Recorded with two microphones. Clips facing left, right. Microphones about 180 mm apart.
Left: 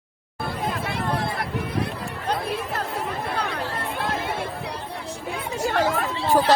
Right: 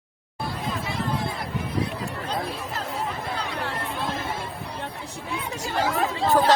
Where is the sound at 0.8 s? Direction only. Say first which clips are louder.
Left 2 dB; 60° left (ahead or behind).